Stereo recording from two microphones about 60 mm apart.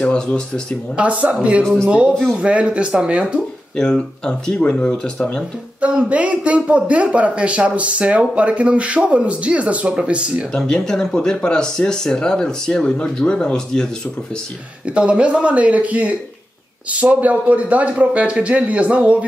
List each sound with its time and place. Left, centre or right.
0.0 s speech: centre
0.9 s a man's voice: right
1.6 s speech: centre
1.9 s a man's voice: centre
3.7 s speech: centre
4.9 s speech: centre
5.8 s a man's voice: centre
10.5 s speech: centre
15.0 s a man's voice: centre